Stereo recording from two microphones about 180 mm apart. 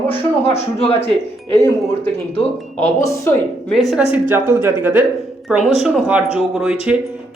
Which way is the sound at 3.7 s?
Centre (ahead or behind).